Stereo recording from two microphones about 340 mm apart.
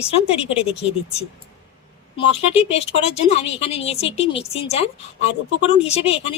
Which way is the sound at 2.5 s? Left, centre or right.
Centre.